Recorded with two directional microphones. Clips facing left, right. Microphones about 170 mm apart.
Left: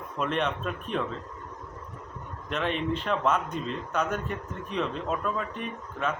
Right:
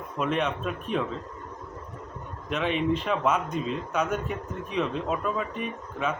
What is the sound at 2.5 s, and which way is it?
Speech, 5° right (ahead or behind).